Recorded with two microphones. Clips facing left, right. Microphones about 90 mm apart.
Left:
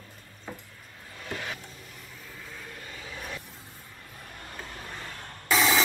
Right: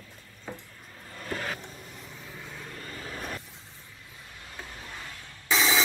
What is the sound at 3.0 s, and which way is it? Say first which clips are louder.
Vehicle: right 2 dB; 45° right (ahead or behind).